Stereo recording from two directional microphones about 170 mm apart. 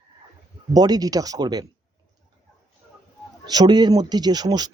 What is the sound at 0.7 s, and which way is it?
Speech, 20° right (ahead or behind).